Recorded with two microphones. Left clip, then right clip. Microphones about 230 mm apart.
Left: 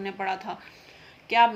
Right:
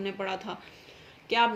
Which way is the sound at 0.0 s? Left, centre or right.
Left.